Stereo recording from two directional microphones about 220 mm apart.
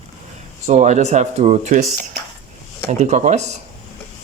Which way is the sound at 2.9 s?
30° right (ahead or behind).